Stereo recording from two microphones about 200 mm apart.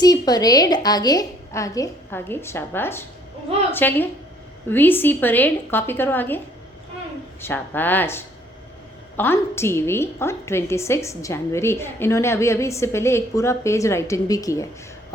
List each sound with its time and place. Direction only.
0.0 s a woman's voice: 20° left (ahead or behind)
7.4 s a woman's voice: 10° left (ahead or behind)